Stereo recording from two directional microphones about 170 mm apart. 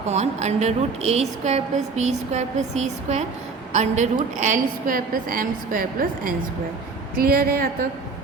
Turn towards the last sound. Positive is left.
turn(degrees=-65)  # may be behind; listen again after turning